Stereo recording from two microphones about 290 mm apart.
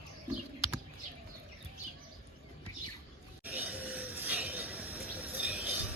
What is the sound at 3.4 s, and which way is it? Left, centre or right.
Chink, centre.